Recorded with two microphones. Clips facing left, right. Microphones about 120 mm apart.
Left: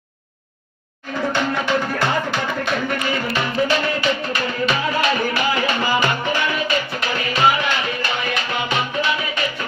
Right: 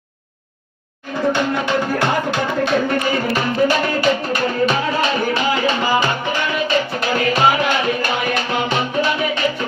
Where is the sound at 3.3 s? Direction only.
45° right (ahead or behind).